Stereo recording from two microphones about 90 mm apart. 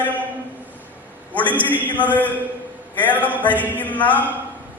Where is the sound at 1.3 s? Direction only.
15° left (ahead or behind).